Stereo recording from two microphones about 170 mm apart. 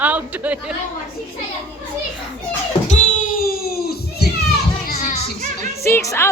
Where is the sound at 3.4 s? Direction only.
60° left (ahead or behind).